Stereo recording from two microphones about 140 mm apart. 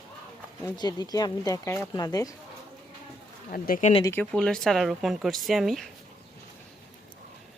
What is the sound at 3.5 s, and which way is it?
Speech, 90° left.